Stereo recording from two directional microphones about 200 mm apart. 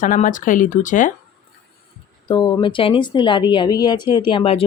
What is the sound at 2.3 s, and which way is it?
Speech, 20° left (ahead or behind).